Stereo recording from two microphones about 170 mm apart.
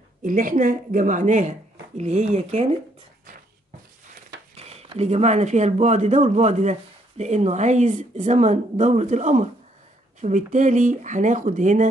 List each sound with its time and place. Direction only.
0.2 s speech: 55° right (ahead or behind)
4.6 s speech: 40° right (ahead or behind)